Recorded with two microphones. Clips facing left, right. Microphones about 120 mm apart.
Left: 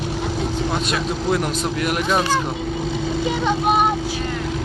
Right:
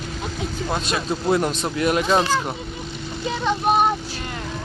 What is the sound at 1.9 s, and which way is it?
Speech, 25° right (ahead or behind).